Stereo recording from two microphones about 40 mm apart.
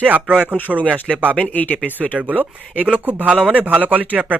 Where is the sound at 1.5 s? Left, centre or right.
Left.